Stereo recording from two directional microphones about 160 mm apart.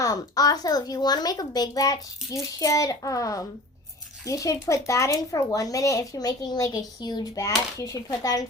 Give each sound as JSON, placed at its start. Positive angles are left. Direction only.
{"t": 0.0, "sound": "a woman's voice", "side_deg": 20}